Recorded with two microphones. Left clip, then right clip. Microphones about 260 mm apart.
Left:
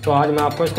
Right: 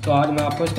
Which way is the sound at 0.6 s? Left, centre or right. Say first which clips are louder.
Left 3 dB; centre.